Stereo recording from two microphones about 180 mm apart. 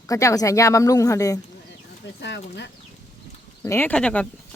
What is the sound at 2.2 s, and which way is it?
Speech, 75° left (ahead or behind).